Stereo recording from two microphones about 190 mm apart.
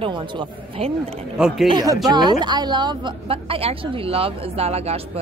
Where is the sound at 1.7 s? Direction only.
20° right (ahead or behind).